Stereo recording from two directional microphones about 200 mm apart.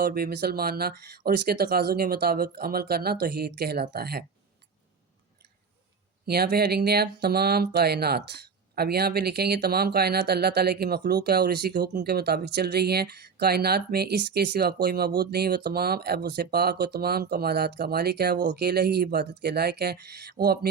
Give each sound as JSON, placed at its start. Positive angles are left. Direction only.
{"t": 0.0, "sound": "speech", "side_deg": -50}
{"t": 6.2, "sound": "speech", "side_deg": -50}